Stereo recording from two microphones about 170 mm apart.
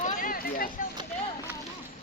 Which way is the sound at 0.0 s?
55° left (ahead or behind).